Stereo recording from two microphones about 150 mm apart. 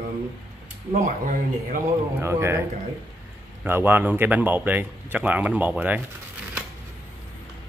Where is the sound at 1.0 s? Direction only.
65° right (ahead or behind).